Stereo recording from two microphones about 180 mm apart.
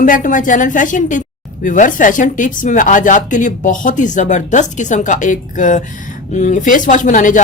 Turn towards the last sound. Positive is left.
turn(degrees=45)  # may be behind; listen again after turning